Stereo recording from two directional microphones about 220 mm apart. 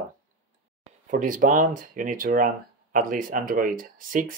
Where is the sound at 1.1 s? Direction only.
35° right (ahead or behind).